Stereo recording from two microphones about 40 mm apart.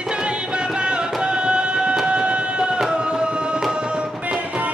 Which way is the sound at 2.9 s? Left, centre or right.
Right.